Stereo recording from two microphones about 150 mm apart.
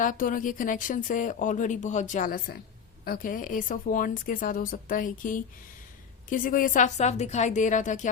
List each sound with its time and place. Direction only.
0.0 s speech: 60° left (ahead or behind)